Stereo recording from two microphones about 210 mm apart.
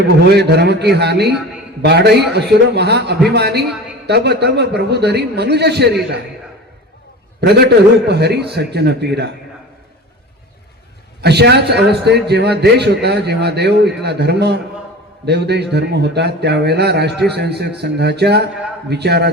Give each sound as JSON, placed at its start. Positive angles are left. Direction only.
{"t": 0.3, "sound": "a man's voice", "side_deg": -50}
{"t": 7.4, "sound": "a man's voice", "side_deg": -50}
{"t": 11.2, "sound": "a man's voice", "side_deg": -50}